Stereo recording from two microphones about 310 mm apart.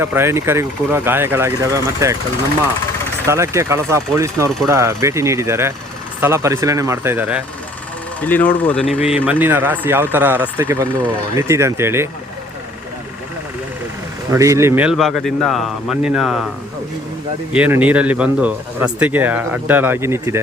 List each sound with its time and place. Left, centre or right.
0.0 s speech: centre
3.2 s speech: centre
8.2 s speech: centre
14.3 s speech: centre
17.5 s speech: centre